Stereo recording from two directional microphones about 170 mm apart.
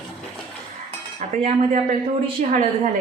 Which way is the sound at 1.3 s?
40° right (ahead or behind).